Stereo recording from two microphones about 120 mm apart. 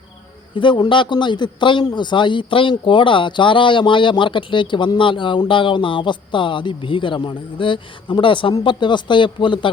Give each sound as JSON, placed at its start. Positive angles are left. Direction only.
{"t": 0.5, "sound": "a man's voice", "side_deg": 40}